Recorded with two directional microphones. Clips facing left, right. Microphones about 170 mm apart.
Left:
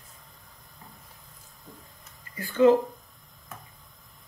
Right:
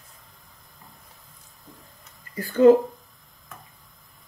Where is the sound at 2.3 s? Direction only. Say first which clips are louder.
Right 4 dB; 40° right (ahead or behind).